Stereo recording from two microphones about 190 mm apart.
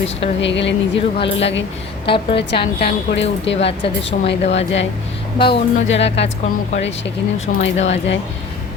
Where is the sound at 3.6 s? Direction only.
30° left (ahead or behind).